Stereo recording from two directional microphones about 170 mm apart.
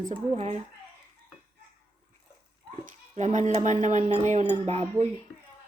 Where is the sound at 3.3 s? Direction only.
45° right (ahead or behind).